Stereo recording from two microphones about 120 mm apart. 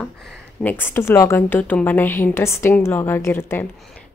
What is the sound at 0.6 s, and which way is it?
Speech, 15° left (ahead or behind).